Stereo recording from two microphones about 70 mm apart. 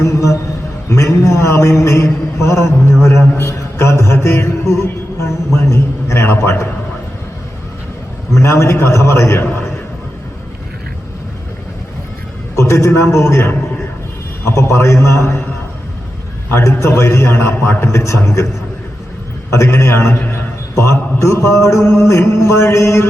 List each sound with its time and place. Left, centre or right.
0.0 s a sound: left
3.3 s music: left
5.6 s a man's voice: left
8.4 s a man's voice: left
12.5 s a sound: left
14.4 s a man's voice: left
16.5 s a man's voice: left
19.5 s a man's voice: left